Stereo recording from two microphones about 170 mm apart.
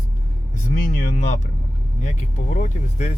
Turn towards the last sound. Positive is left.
turn(degrees=45)  # may be behind; listen again after turning